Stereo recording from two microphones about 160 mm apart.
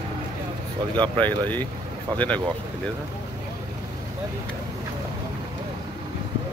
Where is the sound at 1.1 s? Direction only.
10° left (ahead or behind).